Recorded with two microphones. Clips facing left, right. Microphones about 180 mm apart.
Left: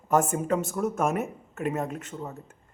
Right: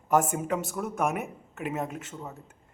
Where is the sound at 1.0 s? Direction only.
15° right (ahead or behind).